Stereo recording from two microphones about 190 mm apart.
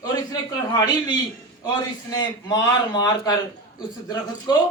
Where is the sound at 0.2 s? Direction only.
20° left (ahead or behind).